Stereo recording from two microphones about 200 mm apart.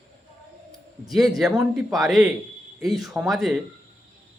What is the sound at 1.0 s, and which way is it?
A woman's voice, centre (ahead or behind).